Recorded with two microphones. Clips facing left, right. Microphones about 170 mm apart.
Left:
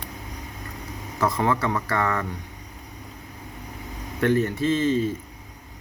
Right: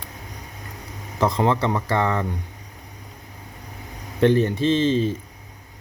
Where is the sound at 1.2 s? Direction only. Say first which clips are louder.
Right 3 dB; 25° right (ahead or behind).